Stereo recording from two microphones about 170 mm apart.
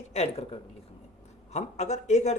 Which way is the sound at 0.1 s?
40° left (ahead or behind).